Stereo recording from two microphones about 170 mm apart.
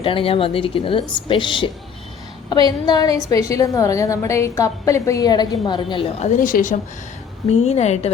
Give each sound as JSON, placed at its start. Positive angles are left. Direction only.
{"t": 0.0, "sound": "a woman's voice", "side_deg": 30}
{"t": 7.5, "sound": "a woman's voice", "side_deg": 40}